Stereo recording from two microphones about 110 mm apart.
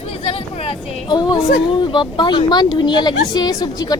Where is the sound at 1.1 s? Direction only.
40° left (ahead or behind).